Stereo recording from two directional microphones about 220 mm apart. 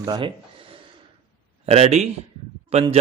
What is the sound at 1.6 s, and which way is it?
Speech, 30° right (ahead or behind).